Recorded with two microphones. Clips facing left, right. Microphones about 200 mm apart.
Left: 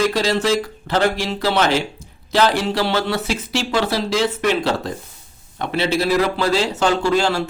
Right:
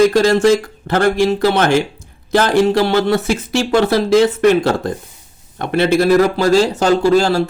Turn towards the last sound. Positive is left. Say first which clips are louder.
# right 6 dB
turn(degrees=-40)  # may be behind; listen again after turning